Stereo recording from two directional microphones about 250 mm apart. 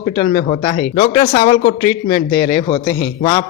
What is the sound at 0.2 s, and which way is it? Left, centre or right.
A man's voice, left.